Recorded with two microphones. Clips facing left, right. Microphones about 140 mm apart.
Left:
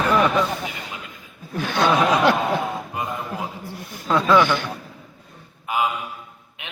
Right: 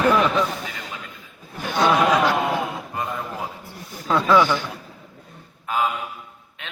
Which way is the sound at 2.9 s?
15° left (ahead or behind).